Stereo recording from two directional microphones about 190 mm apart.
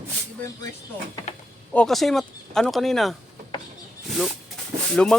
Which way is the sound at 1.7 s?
5° left (ahead or behind).